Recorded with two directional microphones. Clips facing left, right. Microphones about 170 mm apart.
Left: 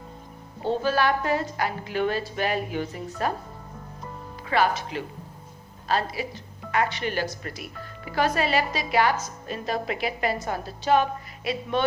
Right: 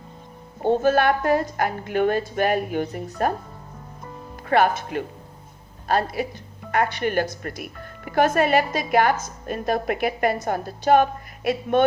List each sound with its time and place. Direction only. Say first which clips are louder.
0.6 s speech: right 5 dB; 50° right (ahead or behind)
4.4 s speech: right 4 dB; 55° right (ahead or behind)